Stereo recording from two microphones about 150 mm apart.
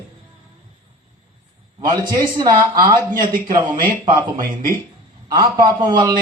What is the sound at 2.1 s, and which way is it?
Speech, 30° right (ahead or behind).